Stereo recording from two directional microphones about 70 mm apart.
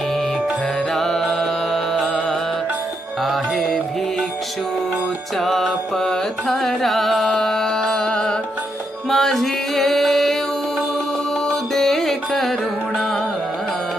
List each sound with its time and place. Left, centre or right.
0.9 s music: centre
3.2 s music: centre
5.4 s carnatic music: centre
9.0 s music: centre
11.4 s music: centre